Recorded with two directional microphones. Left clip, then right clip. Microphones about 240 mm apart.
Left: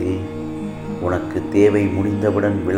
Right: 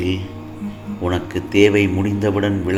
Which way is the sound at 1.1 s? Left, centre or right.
Right.